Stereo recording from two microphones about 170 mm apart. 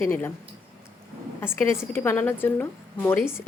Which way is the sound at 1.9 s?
10° left (ahead or behind).